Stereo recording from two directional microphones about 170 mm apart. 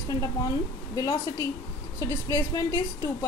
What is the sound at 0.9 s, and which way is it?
A woman's voice, 20° left (ahead or behind).